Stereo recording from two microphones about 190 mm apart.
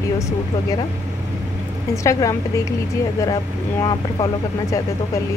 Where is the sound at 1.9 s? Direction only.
15° left (ahead or behind).